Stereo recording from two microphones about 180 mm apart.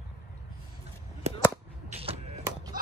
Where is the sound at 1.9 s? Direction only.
30° right (ahead or behind).